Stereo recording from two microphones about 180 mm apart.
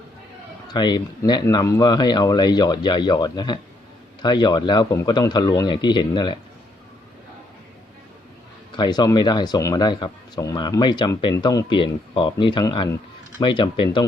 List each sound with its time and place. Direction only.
0.7 s speech: 25° left (ahead or behind)
8.7 s speech: 25° left (ahead or behind)